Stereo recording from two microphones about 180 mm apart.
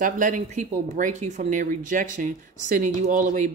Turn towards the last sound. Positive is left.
turn(degrees=-45)  # may be behind; listen again after turning